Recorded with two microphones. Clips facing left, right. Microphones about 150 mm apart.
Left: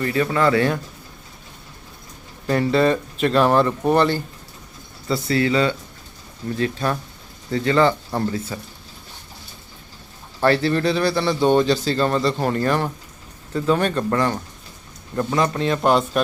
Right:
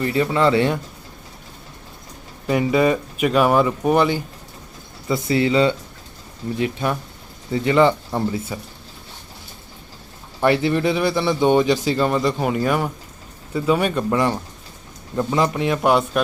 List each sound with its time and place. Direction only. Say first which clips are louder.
0.0 s speech: right 1 dB; 20° right (ahead or behind)
2.5 s speech: even; 10° right (ahead or behind)
5.0 s speech: right 1 dB; 20° right (ahead or behind)
10.4 s speech: even; 15° right (ahead or behind)